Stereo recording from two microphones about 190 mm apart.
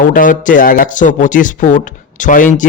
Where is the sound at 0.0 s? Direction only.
45° left (ahead or behind).